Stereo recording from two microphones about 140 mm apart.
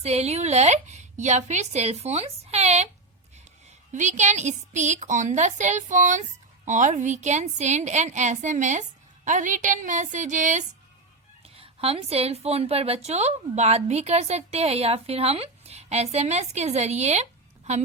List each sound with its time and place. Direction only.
0.0 s speech: 50° right (ahead or behind)
3.9 s a woman's voice: 60° right (ahead or behind)
11.4 s a woman's voice: 45° right (ahead or behind)